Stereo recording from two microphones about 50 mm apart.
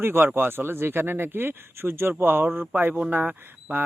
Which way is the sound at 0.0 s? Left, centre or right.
Right.